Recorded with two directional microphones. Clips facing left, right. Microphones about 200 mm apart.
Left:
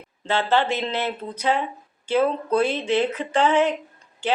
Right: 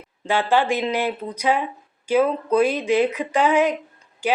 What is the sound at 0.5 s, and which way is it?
Speech, 10° right (ahead or behind).